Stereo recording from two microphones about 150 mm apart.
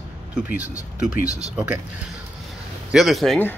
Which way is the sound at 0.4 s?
10° right (ahead or behind).